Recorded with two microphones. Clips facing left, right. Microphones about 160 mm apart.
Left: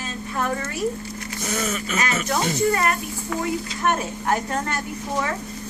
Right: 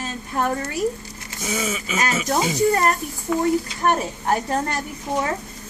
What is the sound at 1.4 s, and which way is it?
Speech, 5° right (ahead or behind).